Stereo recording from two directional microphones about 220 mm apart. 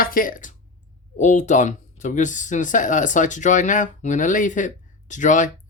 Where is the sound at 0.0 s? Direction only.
40° left (ahead or behind).